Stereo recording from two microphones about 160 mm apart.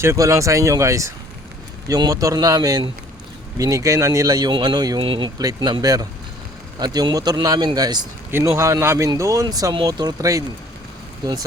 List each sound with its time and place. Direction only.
0.0 s speech: 20° right (ahead or behind)